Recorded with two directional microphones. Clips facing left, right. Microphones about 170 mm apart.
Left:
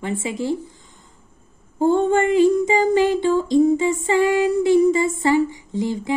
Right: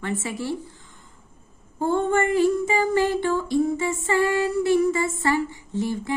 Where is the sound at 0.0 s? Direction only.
15° left (ahead or behind).